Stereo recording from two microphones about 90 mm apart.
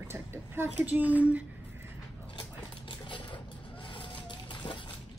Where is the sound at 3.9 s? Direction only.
65° left (ahead or behind).